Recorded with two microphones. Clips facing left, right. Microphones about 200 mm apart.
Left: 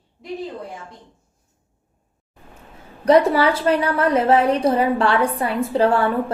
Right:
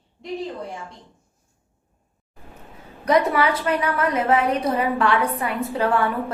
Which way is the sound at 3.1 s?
30° left (ahead or behind).